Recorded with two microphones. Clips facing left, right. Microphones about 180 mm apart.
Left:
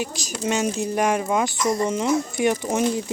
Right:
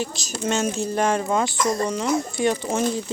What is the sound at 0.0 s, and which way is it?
Speech, 10° left (ahead or behind).